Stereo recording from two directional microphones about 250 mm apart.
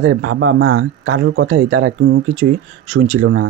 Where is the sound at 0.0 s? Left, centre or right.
Right.